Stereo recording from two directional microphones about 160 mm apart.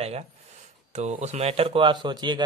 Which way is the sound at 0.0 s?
40° right (ahead or behind).